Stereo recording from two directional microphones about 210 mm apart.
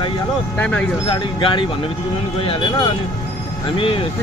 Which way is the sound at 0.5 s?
5° left (ahead or behind).